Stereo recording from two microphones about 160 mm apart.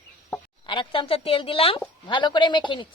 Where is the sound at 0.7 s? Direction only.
30° left (ahead or behind).